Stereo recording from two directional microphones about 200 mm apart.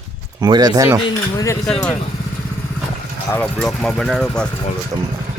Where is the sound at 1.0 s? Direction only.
15° left (ahead or behind).